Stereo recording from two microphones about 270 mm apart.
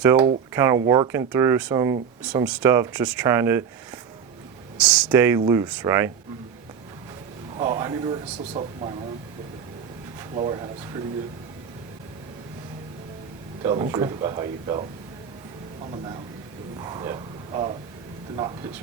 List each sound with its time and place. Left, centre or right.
0.0 s speech: centre
4.8 s speech: centre
7.6 s speech: centre
10.3 s speech: centre
13.6 s speech: centre
16.8 s a sound: centre